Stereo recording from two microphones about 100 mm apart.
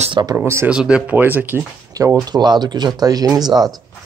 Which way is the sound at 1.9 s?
40° right (ahead or behind).